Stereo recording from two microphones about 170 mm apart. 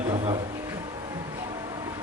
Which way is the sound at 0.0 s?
25° right (ahead or behind).